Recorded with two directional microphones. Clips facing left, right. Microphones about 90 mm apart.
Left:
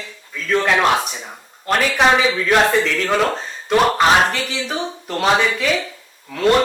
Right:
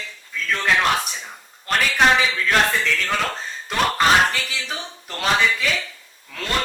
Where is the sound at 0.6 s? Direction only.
35° left (ahead or behind).